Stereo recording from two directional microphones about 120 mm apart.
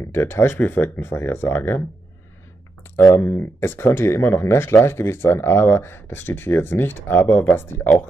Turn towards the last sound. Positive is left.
turn(degrees=20)  # may be behind; listen again after turning